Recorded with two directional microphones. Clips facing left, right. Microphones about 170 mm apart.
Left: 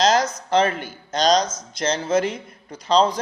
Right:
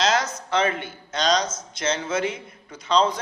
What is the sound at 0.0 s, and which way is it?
A man's voice, 40° left (ahead or behind).